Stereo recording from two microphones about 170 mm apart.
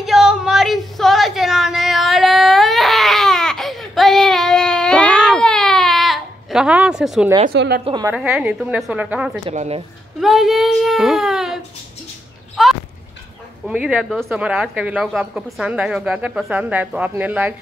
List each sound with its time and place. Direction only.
0.0 s a sound: centre (ahead or behind)
7.5 s a woman's voice: 85° right
7.8 s a woman's voice: 25° right (ahead or behind)
8.1 s a woman's voice: 5° right (ahead or behind)
9.5 s speech: 35° right (ahead or behind)
10.2 s speech: centre (ahead or behind)
12.6 s a sound: centre (ahead or behind)
13.7 s a woman's voice: 5° right (ahead or behind)